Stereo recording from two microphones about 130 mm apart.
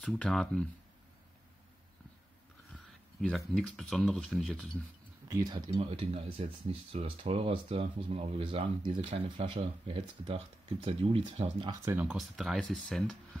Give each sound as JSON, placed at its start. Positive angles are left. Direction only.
{"t": 0.0, "sound": "speech", "side_deg": 5}
{"t": 3.2, "sound": "speech", "side_deg": 5}
{"t": 5.3, "sound": "speech", "side_deg": -30}
{"t": 5.7, "sound": "speech", "side_deg": -50}
{"t": 11.8, "sound": "speech", "side_deg": -20}
{"t": 12.1, "sound": "speech", "side_deg": 0}